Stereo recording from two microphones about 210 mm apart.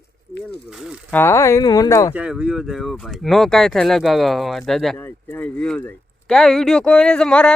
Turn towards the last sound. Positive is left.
turn(degrees=5)  # may be behind; listen again after turning